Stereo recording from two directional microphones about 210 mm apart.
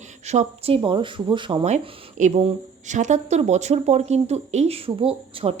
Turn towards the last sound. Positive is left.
turn(degrees=-25)  # may be behind; listen again after turning